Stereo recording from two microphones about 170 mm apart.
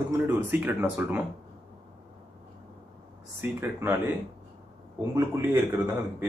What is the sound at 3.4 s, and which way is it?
A man's voice, 15° right (ahead or behind).